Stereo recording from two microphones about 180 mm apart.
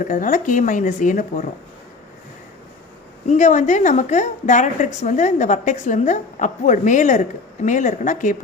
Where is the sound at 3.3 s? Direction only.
40° left (ahead or behind).